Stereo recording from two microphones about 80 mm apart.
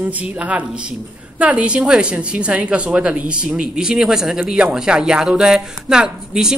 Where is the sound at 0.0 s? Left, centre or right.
Centre.